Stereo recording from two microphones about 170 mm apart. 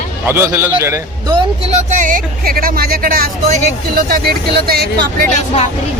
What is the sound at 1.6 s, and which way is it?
Speech, 40° right (ahead or behind).